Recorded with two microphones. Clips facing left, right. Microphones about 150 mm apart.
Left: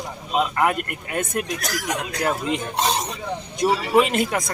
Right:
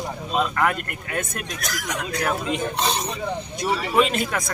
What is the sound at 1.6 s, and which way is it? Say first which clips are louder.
Speech: left 2 dB; 35° left (ahead or behind).